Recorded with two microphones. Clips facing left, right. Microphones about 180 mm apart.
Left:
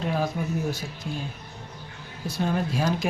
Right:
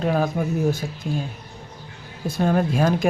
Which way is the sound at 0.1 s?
50° right (ahead or behind).